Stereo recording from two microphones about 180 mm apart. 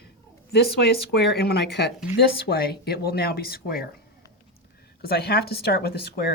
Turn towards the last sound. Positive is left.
turn(degrees=60)  # may be behind; listen again after turning